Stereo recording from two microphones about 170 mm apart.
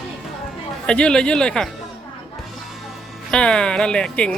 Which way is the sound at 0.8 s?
5° left (ahead or behind).